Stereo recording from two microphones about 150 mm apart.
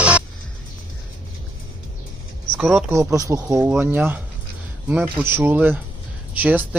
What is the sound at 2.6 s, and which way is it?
Speech, 5° right (ahead or behind).